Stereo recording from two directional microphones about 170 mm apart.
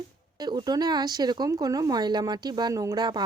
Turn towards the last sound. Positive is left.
turn(degrees=-25)  # may be behind; listen again after turning